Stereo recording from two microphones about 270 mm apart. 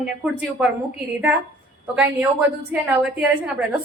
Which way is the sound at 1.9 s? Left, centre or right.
Centre.